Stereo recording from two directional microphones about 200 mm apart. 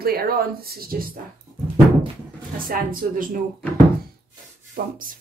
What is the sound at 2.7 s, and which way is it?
Speech, 45° right (ahead or behind).